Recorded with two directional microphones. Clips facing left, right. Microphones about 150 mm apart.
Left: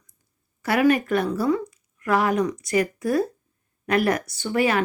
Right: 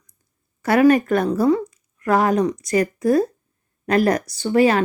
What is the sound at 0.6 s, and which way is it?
Speech, 45° right (ahead or behind).